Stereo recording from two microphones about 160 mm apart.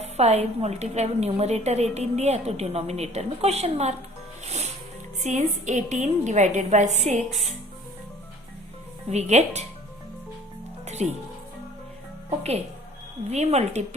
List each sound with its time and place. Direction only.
0.0 s a woman's voice: 40° right (ahead or behind)
4.4 s music: 45° right (ahead or behind)
5.2 s a woman's voice: 50° right (ahead or behind)
9.0 s a woman's voice: 45° right (ahead or behind)
10.8 s music: 45° right (ahead or behind)
13.3 s a woman's voice: 45° right (ahead or behind)